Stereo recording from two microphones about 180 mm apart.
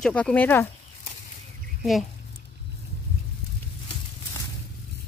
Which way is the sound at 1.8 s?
Centre (ahead or behind).